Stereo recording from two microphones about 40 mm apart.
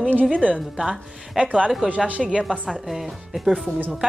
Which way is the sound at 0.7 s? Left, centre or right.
Centre.